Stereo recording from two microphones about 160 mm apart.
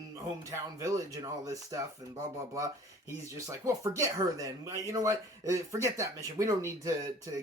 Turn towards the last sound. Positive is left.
turn(degrees=-20)  # may be behind; listen again after turning